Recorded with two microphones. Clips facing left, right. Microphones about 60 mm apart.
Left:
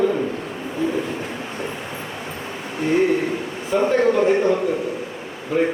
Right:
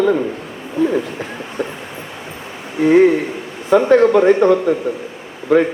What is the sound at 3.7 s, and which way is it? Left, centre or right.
A man's voice, right.